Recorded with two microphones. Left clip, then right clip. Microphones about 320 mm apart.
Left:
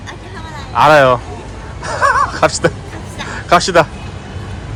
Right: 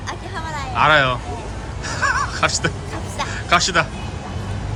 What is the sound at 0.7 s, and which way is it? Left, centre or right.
Speech, centre.